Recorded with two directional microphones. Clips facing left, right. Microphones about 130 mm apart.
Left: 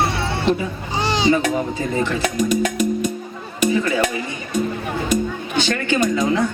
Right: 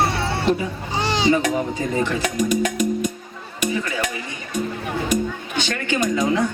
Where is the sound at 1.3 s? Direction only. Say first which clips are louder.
Even; 15° right (ahead or behind).